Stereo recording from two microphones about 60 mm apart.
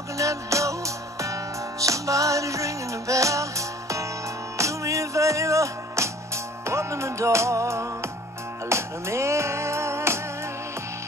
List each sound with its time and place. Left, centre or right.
0.2 s music: right